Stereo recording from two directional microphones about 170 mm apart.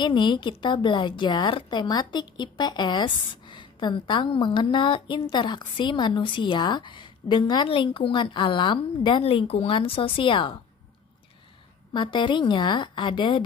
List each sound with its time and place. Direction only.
0.0 s a woman's voice: 25° left (ahead or behind)
11.9 s a woman's voice: 25° left (ahead or behind)